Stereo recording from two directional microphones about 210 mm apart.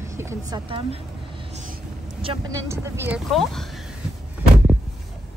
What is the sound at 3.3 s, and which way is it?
Speech, centre (ahead or behind).